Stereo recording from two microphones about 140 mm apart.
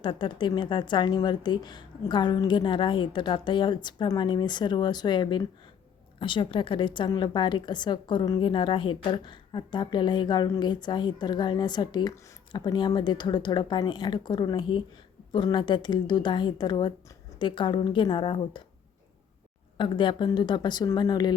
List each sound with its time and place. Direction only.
0.0 s a woman's voice: 35° left (ahead or behind)
19.7 s a woman's voice: 35° left (ahead or behind)